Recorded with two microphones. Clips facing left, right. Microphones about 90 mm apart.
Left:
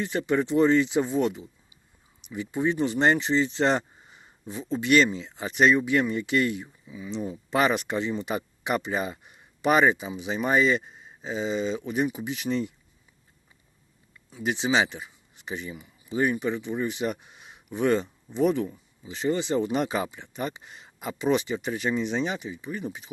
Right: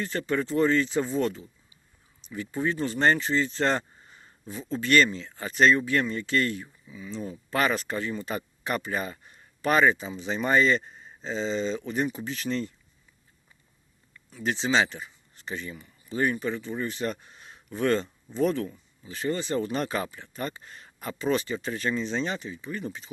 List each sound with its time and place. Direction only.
0.0 s speech: 15° left (ahead or behind)
14.3 s speech: 15° left (ahead or behind)